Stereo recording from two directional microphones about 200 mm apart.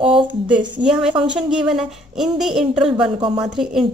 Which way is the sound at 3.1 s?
20° right (ahead or behind).